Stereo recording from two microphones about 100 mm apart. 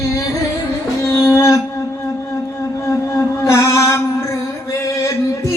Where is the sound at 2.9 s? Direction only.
30° left (ahead or behind).